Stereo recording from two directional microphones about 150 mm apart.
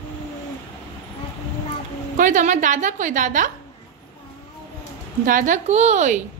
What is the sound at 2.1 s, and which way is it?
A woman's voice, 60° right (ahead or behind).